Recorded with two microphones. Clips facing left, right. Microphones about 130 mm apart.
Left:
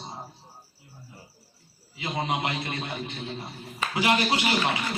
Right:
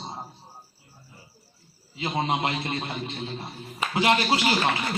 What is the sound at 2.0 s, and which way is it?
Speech, 30° right (ahead or behind).